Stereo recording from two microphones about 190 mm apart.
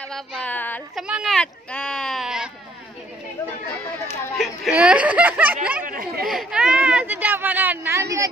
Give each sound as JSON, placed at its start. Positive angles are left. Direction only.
{"t": 0.1, "sound": "speech", "side_deg": 5}
{"t": 0.9, "sound": "speech", "side_deg": -5}
{"t": 4.4, "sound": "speech", "side_deg": -5}
{"t": 5.9, "sound": "speech", "side_deg": -50}
{"t": 6.2, "sound": "speech", "side_deg": -5}